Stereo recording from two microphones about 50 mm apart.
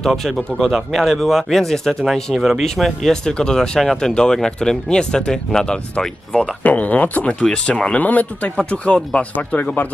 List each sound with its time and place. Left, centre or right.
0.0 s speech: centre
6.6 s speech: left
7.4 s speech: left
9.3 s speech: left